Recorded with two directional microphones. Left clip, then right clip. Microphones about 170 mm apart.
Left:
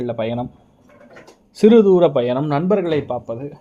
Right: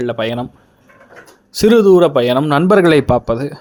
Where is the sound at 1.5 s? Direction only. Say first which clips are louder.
Right 3 dB; 10° right (ahead or behind).